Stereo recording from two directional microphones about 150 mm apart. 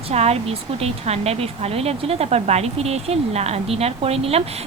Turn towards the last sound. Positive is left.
turn(degrees=-40)  # may be behind; listen again after turning